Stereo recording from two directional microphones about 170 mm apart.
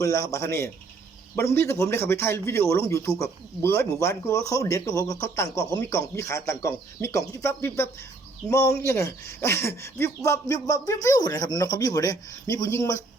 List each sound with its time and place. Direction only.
0.0 s a man's voice: 20° left (ahead or behind)